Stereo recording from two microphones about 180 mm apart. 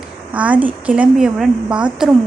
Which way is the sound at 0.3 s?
10° right (ahead or behind).